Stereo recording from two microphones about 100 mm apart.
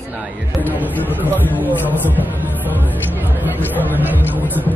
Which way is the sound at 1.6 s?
15° right (ahead or behind).